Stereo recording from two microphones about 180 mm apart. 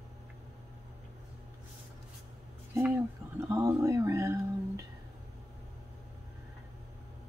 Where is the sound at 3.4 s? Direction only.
15° right (ahead or behind).